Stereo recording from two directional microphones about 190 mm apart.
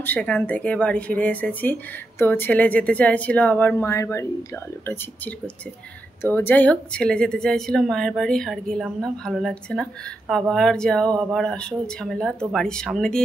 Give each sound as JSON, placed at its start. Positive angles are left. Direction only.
{"t": 0.0, "sound": "a woman's voice", "side_deg": 10}